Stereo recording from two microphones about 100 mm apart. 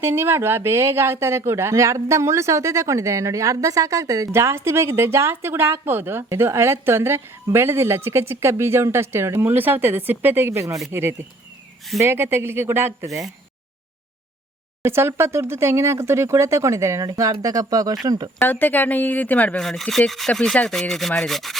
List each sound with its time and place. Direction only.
0.0 s speech: 25° right (ahead or behind)
14.8 s speech: 25° right (ahead or behind)
18.3 s speech: 20° left (ahead or behind); by 21.1 s 5° left (ahead or behind)
21.1 s rub: 5° left (ahead or behind)